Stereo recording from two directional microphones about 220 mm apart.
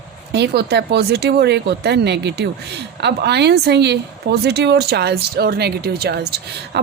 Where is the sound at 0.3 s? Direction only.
50° right (ahead or behind).